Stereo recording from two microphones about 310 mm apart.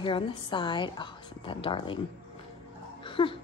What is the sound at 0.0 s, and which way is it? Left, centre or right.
A woman's voice, centre.